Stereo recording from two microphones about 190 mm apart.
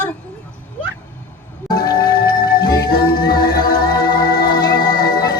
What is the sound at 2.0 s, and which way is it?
Music, 50° left (ahead or behind).